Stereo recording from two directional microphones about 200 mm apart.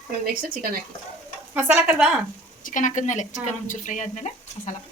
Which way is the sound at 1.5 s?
5° right (ahead or behind).